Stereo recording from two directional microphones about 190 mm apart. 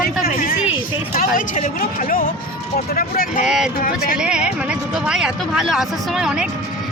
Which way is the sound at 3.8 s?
50° left (ahead or behind).